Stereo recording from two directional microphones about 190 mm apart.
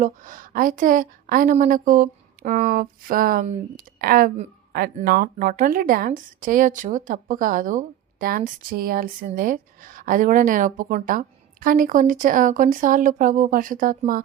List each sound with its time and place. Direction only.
0.0 s a woman's voice: 45° right (ahead or behind)